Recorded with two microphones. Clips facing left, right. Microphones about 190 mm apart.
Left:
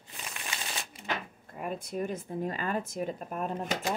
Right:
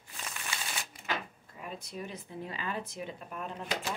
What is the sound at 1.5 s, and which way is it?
A woman's voice, 50° left (ahead or behind).